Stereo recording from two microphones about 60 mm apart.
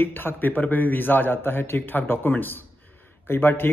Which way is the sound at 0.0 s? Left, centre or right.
Left.